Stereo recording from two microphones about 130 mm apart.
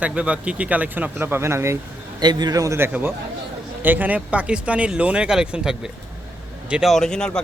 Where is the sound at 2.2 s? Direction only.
35° right (ahead or behind).